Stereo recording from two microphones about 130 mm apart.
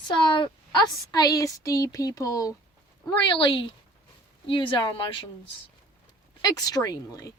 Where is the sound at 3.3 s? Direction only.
40° left (ahead or behind).